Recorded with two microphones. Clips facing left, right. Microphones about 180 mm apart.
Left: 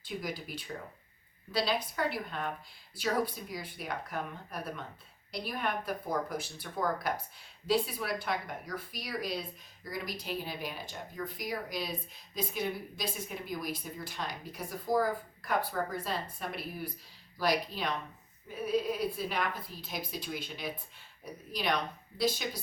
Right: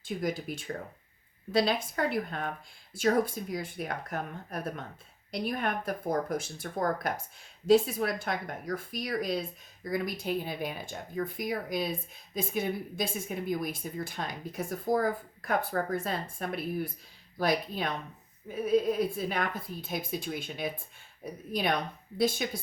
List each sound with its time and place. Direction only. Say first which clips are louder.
0.0 s a woman's voice: right 6 dB; 45° right (ahead or behind)